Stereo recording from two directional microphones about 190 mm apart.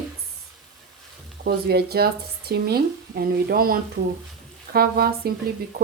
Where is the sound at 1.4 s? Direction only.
55° right (ahead or behind).